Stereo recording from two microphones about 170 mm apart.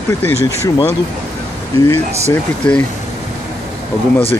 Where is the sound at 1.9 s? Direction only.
40° right (ahead or behind).